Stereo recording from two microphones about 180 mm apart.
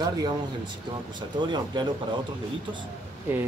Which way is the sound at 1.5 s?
25° right (ahead or behind).